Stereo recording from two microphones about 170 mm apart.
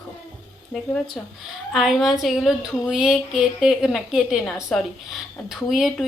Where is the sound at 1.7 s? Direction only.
Centre (ahead or behind).